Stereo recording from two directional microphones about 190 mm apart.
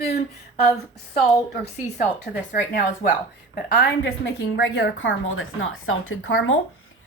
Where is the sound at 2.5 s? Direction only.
50° left (ahead or behind).